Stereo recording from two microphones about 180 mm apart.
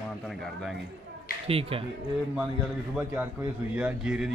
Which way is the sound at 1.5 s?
30° right (ahead or behind).